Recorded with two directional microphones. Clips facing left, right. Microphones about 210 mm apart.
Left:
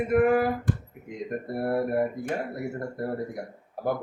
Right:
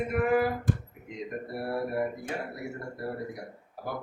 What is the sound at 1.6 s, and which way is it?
Speech, 55° left (ahead or behind).